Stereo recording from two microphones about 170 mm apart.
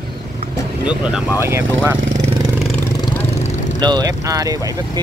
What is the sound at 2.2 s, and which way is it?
Vehicle, 30° right (ahead or behind).